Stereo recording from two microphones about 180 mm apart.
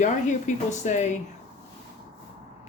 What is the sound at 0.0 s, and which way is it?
Speech, 40° left (ahead or behind).